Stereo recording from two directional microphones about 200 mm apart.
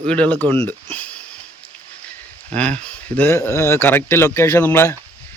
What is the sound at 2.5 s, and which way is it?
Speech, 5° left (ahead or behind).